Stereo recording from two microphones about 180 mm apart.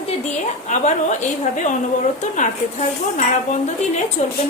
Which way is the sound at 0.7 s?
40° left (ahead or behind).